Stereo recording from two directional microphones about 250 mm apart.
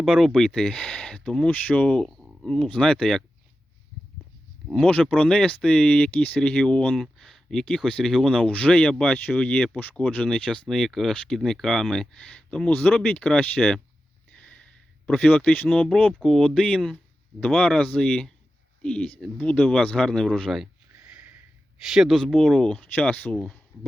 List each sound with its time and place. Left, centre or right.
0.0 s speech: centre
4.7 s speech: centre
15.0 s speech: centre
21.8 s speech: centre